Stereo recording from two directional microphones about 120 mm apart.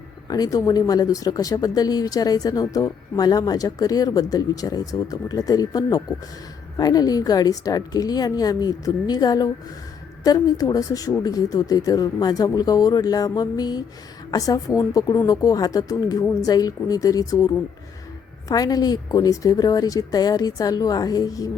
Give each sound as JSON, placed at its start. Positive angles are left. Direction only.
{"t": 0.3, "sound": "a woman's voice", "side_deg": 30}